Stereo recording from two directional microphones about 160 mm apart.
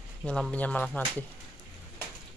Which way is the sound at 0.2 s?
5° left (ahead or behind).